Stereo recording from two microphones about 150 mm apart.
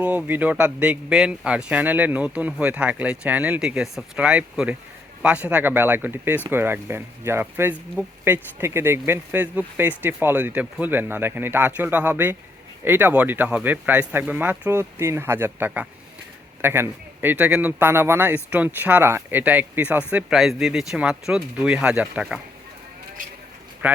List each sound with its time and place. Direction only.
0.0 s speech: 10° right (ahead or behind)
23.8 s speech: 10° right (ahead or behind)